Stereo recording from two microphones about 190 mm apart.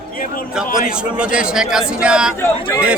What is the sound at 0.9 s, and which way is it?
A man's voice, 5° right (ahead or behind).